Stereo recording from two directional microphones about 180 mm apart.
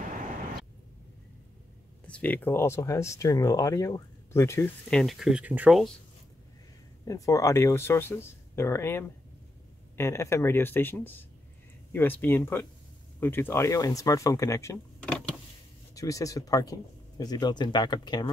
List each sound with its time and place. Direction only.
2.0 s speech: 10° left (ahead or behind)
7.1 s speech: 20° left (ahead or behind)
15.0 s power windows: 5° left (ahead or behind)
15.9 s speech: 20° left (ahead or behind)